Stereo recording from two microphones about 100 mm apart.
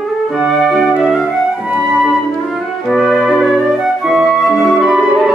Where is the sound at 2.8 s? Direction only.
Centre (ahead or behind).